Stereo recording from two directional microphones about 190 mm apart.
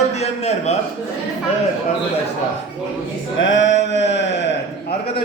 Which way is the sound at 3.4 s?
85° left.